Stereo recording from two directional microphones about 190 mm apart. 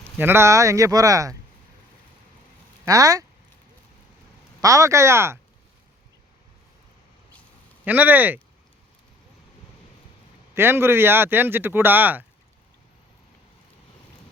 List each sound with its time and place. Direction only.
0.0 s speech: 10° right (ahead or behind)
2.8 s speech: 20° right (ahead or behind)
4.6 s speech: 15° right (ahead or behind)
7.9 s speech: 10° right (ahead or behind)
10.5 s speech: 10° right (ahead or behind)